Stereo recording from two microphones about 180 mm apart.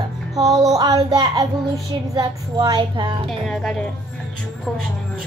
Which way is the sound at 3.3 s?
Centre (ahead or behind).